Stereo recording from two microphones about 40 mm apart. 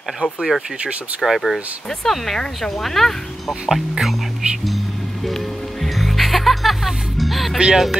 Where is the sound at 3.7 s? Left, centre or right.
Centre.